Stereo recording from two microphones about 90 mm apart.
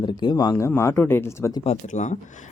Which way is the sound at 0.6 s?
30° left (ahead or behind).